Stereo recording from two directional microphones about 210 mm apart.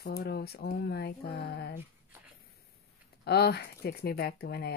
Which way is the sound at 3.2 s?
50° left (ahead or behind).